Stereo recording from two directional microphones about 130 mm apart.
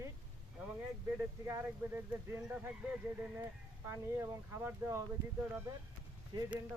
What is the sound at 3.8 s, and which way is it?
Speech, 20° right (ahead or behind).